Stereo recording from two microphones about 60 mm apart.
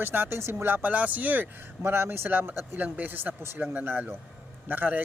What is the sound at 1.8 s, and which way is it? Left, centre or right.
Speech, right.